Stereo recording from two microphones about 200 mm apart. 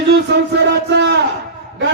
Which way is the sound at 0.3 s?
55° right (ahead or behind).